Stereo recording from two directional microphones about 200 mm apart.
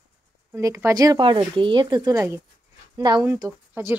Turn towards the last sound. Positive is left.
turn(degrees=-15)  # may be behind; listen again after turning